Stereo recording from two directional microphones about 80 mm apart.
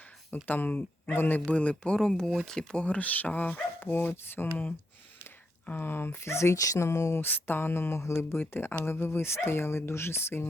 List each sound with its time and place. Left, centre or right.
0.4 s speech: left